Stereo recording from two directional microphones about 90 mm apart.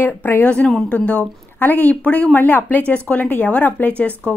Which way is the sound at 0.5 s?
10° left (ahead or behind).